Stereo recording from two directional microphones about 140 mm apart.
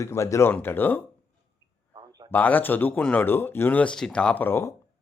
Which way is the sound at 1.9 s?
25° right (ahead or behind).